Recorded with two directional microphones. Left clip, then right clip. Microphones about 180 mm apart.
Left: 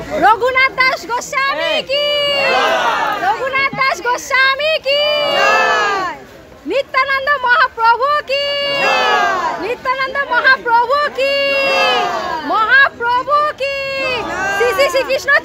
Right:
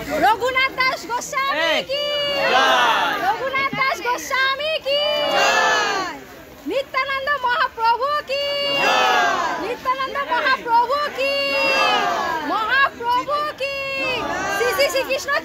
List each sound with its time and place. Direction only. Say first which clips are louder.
0.2 s speech: left 7 dB; 25° left (ahead or behind)
2.5 s crowd: left 2 dB; centre (ahead or behind)
3.3 s speech: left 5 dB; 15° left (ahead or behind)
5.4 s crowd: left 4 dB; 55° left (ahead or behind)
6.7 s speech: left 7 dB; 20° left (ahead or behind)
9.1 s crowd: left 4 dB; 65° left (ahead or behind)
9.8 s speech: left 5 dB; 25° left (ahead or behind)
12.4 s a sound: left 9 dB; 30° left (ahead or behind)
14.7 s a child's voice: left 4 dB; 25° left (ahead or behind)